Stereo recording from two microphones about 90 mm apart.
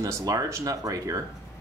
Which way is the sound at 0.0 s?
40° right (ahead or behind).